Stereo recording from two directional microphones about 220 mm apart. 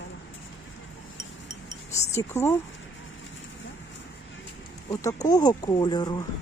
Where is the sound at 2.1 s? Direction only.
10° left (ahead or behind).